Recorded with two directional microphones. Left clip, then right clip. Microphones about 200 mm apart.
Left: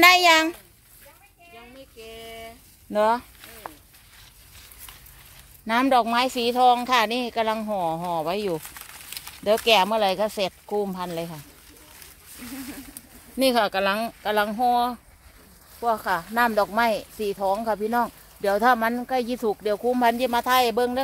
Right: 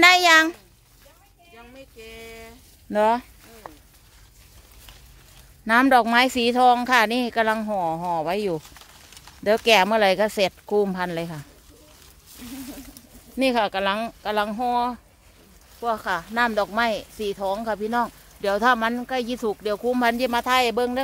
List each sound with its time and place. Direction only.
0.0 s speech: 10° right (ahead or behind)
2.0 s a sound: 35° right (ahead or behind)
2.9 s speech: 20° right (ahead or behind)
5.7 s speech: 25° right (ahead or behind)
13.4 s speech: centre (ahead or behind)
15.8 s speech: 10° left (ahead or behind)